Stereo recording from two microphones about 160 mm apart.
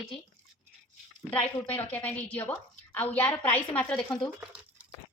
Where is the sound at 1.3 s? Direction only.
10° left (ahead or behind).